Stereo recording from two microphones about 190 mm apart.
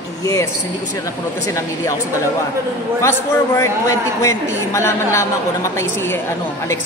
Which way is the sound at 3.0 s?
15° left (ahead or behind).